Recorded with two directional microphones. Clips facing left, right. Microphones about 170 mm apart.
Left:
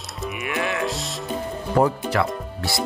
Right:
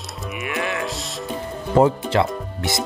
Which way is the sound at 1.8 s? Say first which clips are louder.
Right 3 dB; 25° right (ahead or behind).